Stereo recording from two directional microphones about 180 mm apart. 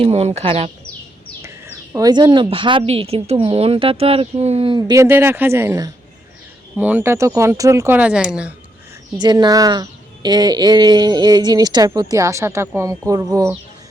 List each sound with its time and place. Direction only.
0.0 s speech: 35° right (ahead or behind)
1.4 s a woman's voice: 15° right (ahead or behind)
9.1 s speech: 25° right (ahead or behind)